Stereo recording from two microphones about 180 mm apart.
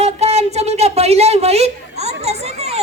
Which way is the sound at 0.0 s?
35° right (ahead or behind).